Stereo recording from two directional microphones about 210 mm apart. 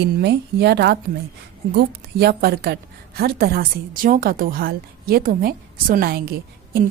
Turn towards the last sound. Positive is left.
turn(degrees=-45)  # may be behind; listen again after turning